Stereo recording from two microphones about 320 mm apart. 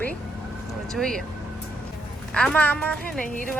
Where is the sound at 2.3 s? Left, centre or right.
Centre.